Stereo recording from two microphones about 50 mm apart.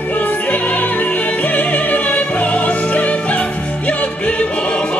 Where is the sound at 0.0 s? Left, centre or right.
Left.